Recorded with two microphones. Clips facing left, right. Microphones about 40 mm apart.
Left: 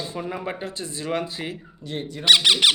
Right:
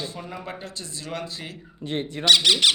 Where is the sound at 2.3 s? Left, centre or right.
Centre.